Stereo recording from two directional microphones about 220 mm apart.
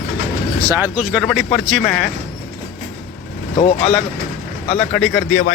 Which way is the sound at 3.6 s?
25° left (ahead or behind).